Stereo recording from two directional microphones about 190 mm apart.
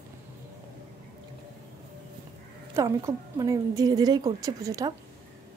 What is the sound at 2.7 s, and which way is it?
A woman's voice, 15° right (ahead or behind).